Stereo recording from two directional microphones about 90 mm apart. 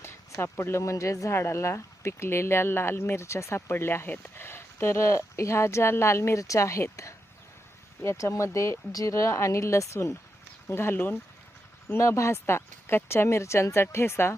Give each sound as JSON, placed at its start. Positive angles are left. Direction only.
{"t": 0.0, "sound": "speech", "side_deg": 30}
{"t": 8.2, "sound": "speech", "side_deg": 35}